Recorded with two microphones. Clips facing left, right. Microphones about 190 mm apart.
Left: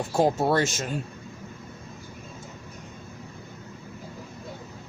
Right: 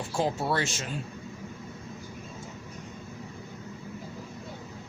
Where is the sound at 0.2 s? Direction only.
45° left (ahead or behind).